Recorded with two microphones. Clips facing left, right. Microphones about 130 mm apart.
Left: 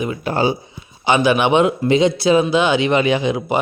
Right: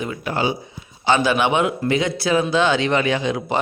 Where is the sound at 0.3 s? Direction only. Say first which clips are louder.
Left 4 dB; 35° left (ahead or behind).